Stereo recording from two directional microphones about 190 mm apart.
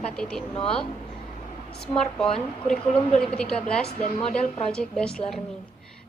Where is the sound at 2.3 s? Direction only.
5° left (ahead or behind).